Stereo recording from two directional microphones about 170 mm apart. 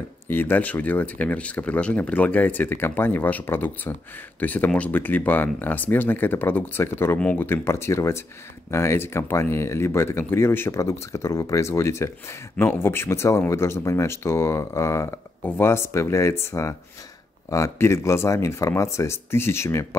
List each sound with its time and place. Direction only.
0.3 s speech: 10° left (ahead or behind)